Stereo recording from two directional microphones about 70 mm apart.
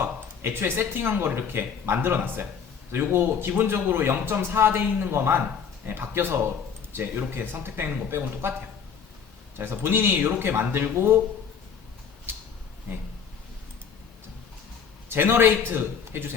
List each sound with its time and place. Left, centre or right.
0.0 s speech: right
12.3 s a sound: right
15.1 s speech: right